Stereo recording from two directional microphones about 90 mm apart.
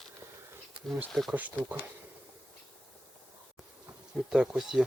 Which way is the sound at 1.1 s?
Centre (ahead or behind).